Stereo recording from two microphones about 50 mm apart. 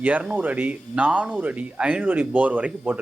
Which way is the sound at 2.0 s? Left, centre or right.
Right.